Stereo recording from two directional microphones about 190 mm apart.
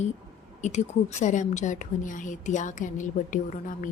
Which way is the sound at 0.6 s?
40° left (ahead or behind).